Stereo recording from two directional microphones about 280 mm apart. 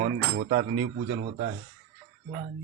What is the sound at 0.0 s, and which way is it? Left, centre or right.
Speech, right.